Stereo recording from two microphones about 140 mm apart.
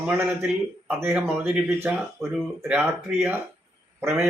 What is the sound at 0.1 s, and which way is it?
Speech, 15° right (ahead or behind).